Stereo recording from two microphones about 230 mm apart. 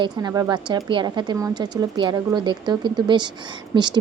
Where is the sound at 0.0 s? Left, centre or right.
Centre.